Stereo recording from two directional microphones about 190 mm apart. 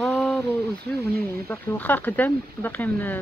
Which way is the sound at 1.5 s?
10° left (ahead or behind).